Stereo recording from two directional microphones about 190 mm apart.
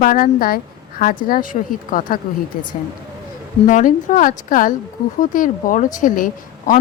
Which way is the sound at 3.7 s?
45° left (ahead or behind).